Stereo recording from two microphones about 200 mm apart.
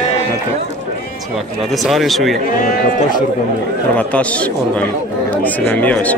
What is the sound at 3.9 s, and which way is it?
A man's voice, 5° left (ahead or behind).